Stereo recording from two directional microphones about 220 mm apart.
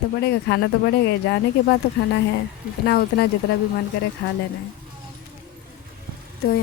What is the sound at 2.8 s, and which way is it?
Speech, 50° left (ahead or behind).